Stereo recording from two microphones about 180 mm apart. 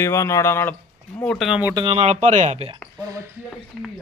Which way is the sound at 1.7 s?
30° right (ahead or behind).